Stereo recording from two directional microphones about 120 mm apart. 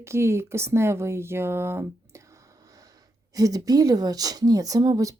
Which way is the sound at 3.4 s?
30° right (ahead or behind).